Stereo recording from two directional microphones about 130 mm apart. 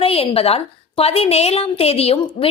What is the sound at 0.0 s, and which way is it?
A woman's voice, 45° left (ahead or behind).